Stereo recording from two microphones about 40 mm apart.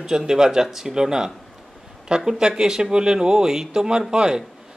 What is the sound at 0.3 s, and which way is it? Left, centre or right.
Speech, centre.